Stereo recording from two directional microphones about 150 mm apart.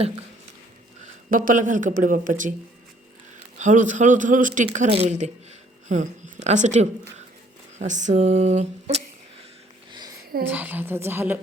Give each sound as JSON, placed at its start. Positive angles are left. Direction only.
{"t": 1.0, "sound": "speech", "side_deg": -65}
{"t": 3.6, "sound": "speech", "side_deg": -55}
{"t": 4.9, "sound": "speech", "side_deg": -45}
{"t": 10.4, "sound": "a woman's voice", "side_deg": -10}